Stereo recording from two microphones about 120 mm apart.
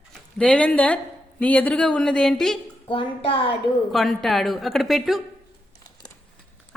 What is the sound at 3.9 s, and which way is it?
A woman's voice, centre (ahead or behind).